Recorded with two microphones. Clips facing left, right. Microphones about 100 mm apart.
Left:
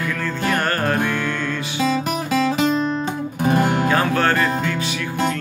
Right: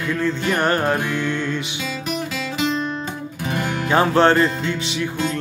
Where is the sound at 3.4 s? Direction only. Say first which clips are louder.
Left 7 dB; 45° left (ahead or behind).